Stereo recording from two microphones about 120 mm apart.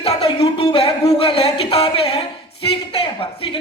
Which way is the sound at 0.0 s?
55° left (ahead or behind).